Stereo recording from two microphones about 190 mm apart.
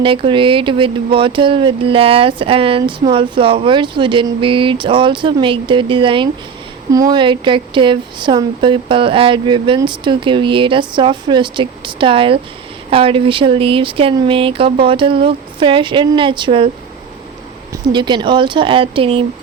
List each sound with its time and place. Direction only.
0.0 s speech: 25° right (ahead or behind)
17.7 s speech: 25° right (ahead or behind)